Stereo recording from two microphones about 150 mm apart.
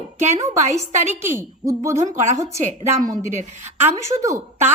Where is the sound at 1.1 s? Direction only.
15° right (ahead or behind).